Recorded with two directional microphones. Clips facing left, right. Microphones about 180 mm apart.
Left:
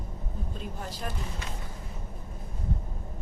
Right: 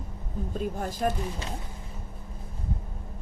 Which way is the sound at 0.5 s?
50° right (ahead or behind).